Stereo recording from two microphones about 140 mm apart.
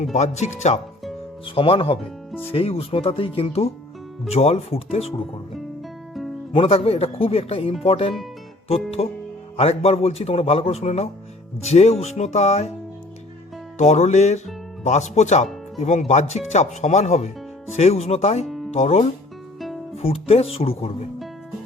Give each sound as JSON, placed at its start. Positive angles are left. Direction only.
{"t": 0.0, "sound": "speech", "side_deg": 55}
{"t": 1.5, "sound": "speech", "side_deg": 40}
{"t": 6.5, "sound": "speech", "side_deg": 45}
{"t": 13.7, "sound": "speech", "side_deg": 55}
{"t": 18.4, "sound": "music", "side_deg": 0}
{"t": 18.7, "sound": "speech", "side_deg": 50}
{"t": 19.5, "sound": "guitar", "side_deg": 0}
{"t": 20.0, "sound": "speech", "side_deg": 45}